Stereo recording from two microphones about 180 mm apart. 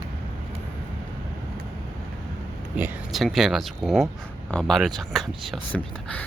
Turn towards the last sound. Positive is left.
turn(degrees=5)  # may be behind; listen again after turning